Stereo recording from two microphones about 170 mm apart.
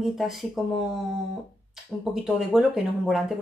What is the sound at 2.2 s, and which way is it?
Speech, centre (ahead or behind).